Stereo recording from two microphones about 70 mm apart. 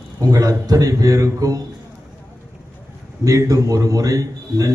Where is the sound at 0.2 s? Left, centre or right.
Right.